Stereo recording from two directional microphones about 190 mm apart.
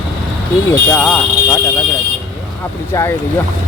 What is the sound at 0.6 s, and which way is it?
Speech, 10° left (ahead or behind).